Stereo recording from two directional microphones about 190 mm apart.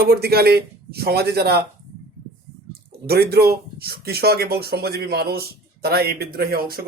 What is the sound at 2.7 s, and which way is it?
Speech, 55° right (ahead or behind).